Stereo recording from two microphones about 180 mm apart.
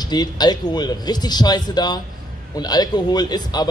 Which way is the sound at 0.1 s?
20° left (ahead or behind).